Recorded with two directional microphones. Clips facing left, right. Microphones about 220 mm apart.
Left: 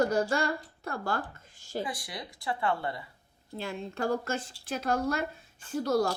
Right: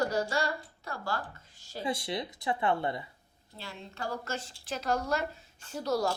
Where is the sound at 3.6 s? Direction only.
50° left (ahead or behind).